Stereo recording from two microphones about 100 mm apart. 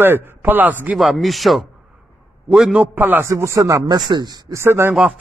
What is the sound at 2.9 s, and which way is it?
Speech, 20° right (ahead or behind).